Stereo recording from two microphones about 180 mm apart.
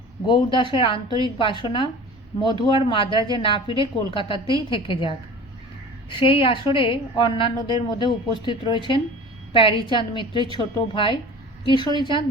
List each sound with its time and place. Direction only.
0.3 s a woman's voice: 25° left (ahead or behind)